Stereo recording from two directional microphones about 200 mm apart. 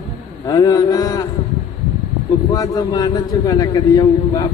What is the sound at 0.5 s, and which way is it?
Speech, 20° left (ahead or behind).